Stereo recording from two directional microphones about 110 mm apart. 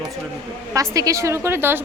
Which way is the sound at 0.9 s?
30° right (ahead or behind).